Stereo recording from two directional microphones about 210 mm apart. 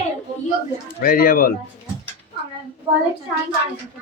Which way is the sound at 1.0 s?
45° left (ahead or behind).